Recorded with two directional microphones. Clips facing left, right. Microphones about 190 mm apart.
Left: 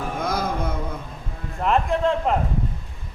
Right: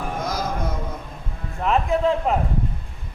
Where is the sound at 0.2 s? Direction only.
55° left (ahead or behind).